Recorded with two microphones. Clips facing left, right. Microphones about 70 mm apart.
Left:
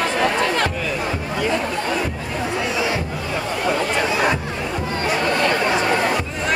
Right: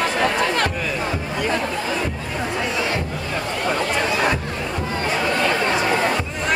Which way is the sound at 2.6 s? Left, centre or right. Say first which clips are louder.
Left 1 dB; centre.